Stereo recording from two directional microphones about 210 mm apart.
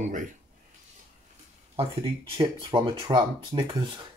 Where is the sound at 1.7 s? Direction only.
25° right (ahead or behind).